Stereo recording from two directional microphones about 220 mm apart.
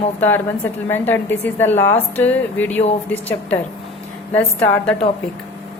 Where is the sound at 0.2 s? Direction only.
10° left (ahead or behind).